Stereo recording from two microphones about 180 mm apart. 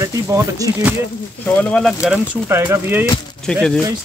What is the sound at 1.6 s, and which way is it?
Speech, 5° left (ahead or behind).